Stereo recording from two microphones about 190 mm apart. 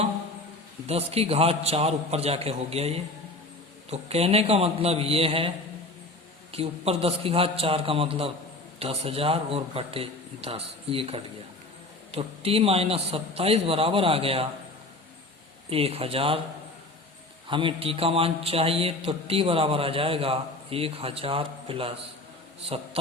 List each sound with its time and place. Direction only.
0.9 s a man's voice: 30° right (ahead or behind)
6.5 s a man's voice: 30° right (ahead or behind)
15.7 s speech: 30° right (ahead or behind)
17.5 s speech: 25° right (ahead or behind)